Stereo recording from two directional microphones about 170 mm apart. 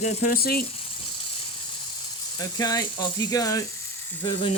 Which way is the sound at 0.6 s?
35° left (ahead or behind).